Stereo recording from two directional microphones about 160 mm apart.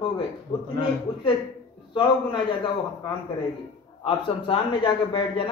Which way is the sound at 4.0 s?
35° left (ahead or behind).